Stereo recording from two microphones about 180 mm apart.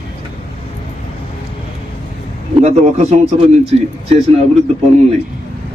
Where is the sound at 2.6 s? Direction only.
40° right (ahead or behind).